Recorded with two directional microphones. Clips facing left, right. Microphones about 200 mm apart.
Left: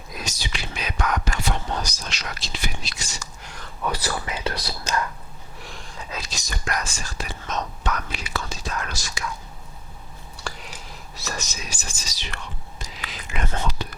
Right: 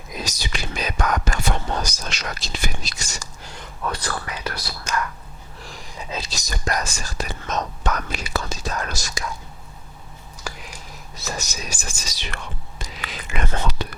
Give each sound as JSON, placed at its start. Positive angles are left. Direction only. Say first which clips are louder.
{"t": 0.2, "sound": "speech", "louder": "right 3 dB", "side_deg": -40}
{"t": 3.8, "sound": "speech", "louder": "left 1 dB", "side_deg": 5}
{"t": 4.3, "sound": "speech", "louder": "left 2 dB", "side_deg": 25}
{"t": 5.5, "sound": "a sound", "louder": "right 1 dB", "side_deg": 0}
{"t": 6.0, "sound": "whispering", "louder": "right 4 dB", "side_deg": -25}
{"t": 6.3, "sound": "speech", "louder": "right 3 dB", "side_deg": -35}
{"t": 10.4, "sound": "a sound", "louder": "right 1 dB", "side_deg": 0}
{"t": 11.7, "sound": "speech", "louder": "right 3 dB", "side_deg": -55}
{"t": 13.0, "sound": "whispering", "louder": "right 2 dB", "side_deg": -75}